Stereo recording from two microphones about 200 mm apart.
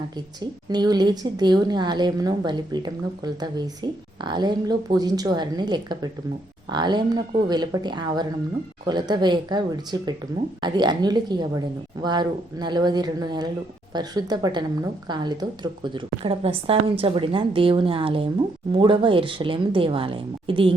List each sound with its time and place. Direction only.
0.7 s a woman's voice: 20° right (ahead or behind)